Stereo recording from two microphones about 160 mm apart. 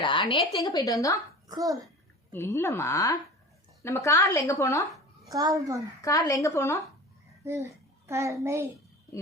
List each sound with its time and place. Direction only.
0.0 s a woman's voice: 30° left (ahead or behind)
1.5 s a child's voice: 20° right (ahead or behind)
2.3 s a woman's voice: 15° left (ahead or behind)
5.3 s a child's voice: 20° right (ahead or behind)
6.0 s a woman's voice: 20° left (ahead or behind)
7.4 s a child's voice: 15° right (ahead or behind)